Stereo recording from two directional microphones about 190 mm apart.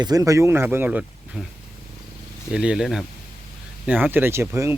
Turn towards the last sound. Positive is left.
turn(degrees=-15)  # may be behind; listen again after turning